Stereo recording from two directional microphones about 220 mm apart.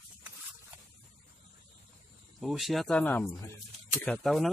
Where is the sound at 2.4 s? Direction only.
Centre (ahead or behind).